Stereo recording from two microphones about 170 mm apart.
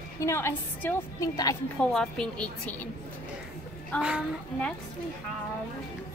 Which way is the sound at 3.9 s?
5° right (ahead or behind).